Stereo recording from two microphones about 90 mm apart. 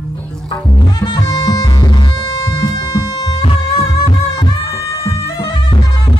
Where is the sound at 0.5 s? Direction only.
50° left (ahead or behind).